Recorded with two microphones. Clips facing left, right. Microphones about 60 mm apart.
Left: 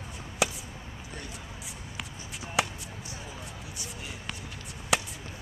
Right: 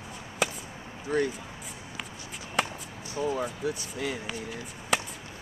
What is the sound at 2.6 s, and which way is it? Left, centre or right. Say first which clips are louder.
Chop: even; centre.